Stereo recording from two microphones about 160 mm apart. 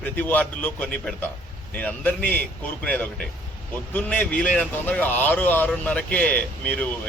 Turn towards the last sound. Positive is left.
turn(degrees=10)  # may be behind; listen again after turning